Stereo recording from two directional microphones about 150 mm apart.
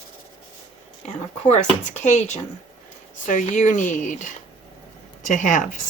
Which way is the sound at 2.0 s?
50° left (ahead or behind).